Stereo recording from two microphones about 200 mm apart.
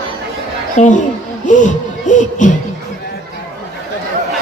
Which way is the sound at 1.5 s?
40° left (ahead or behind).